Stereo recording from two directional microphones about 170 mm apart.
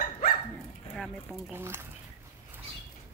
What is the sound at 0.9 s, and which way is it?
Speech, 5° left (ahead or behind).